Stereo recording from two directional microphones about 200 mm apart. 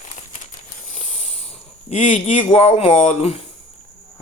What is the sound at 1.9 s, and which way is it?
Speech, 30° left (ahead or behind).